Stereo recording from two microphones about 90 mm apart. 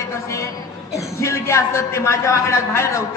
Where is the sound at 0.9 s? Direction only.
35° left (ahead or behind).